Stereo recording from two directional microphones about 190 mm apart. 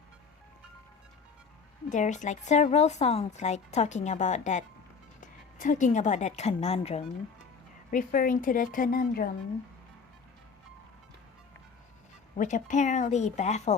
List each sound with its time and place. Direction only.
1.9 s a woman's voice: 40° left (ahead or behind)
7.9 s speech: 45° left (ahead or behind)
12.4 s a woman's voice: 40° left (ahead or behind)